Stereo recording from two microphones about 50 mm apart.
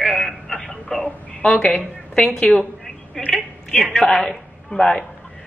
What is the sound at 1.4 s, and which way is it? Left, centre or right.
A woman's voice, left.